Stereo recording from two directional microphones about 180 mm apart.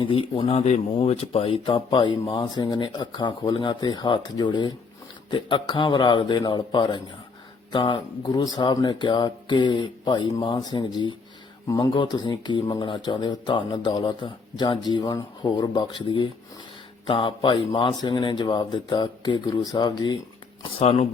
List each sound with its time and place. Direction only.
0.0 s speech: 30° left (ahead or behind)
20.7 s speech: 35° left (ahead or behind)